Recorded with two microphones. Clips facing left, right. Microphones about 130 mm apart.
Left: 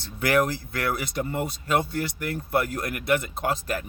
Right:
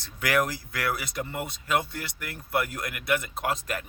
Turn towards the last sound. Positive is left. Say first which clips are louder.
# left 3 dB
turn(degrees=30)  # may be behind; listen again after turning